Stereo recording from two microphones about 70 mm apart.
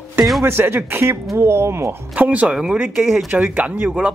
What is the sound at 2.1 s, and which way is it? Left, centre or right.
Speech, right.